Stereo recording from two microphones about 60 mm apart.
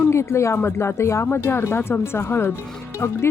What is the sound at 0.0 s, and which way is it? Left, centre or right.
Speech, left.